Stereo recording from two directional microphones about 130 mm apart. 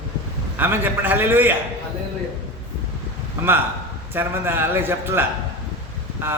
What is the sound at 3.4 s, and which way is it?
A man's voice, 15° right (ahead or behind).